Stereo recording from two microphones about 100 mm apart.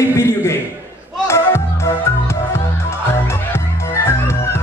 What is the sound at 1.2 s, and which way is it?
Music, 30° left (ahead or behind).